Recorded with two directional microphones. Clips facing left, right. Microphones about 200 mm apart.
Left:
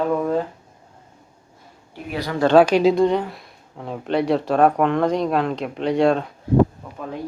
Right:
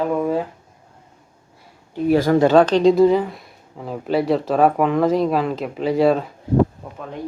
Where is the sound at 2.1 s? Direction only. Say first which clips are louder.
Right 11 dB; 45° right (ahead or behind).